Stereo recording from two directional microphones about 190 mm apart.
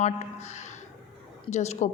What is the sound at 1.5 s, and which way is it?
Speech, 35° left (ahead or behind).